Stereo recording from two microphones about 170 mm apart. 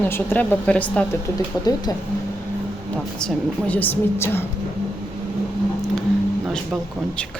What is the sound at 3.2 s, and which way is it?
Speech, 5° left (ahead or behind).